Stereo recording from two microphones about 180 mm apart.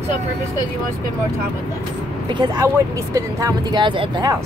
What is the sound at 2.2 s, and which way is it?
Speech, 25° right (ahead or behind).